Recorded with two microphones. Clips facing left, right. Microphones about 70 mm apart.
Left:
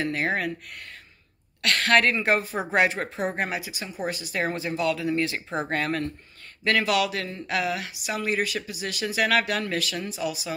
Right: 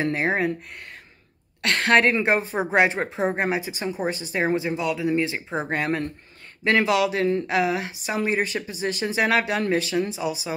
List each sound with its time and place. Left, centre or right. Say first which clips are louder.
0.0 s a woman's voice: right 3 dB; right
1.6 s a woman's voice: right 2 dB; right